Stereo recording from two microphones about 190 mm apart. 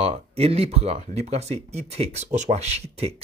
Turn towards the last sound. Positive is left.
turn(degrees=-35)  # may be behind; listen again after turning